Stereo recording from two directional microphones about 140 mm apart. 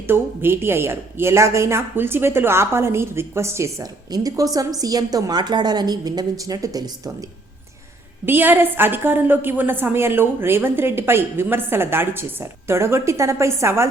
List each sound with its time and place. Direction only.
0.1 s speech: 15° right (ahead or behind)
8.2 s a woman's voice: 15° right (ahead or behind)